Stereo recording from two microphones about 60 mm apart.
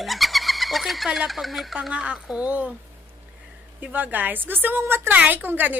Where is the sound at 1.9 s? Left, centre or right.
Centre.